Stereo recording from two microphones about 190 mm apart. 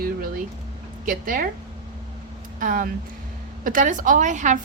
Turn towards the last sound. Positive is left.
turn(degrees=-40)  # may be behind; listen again after turning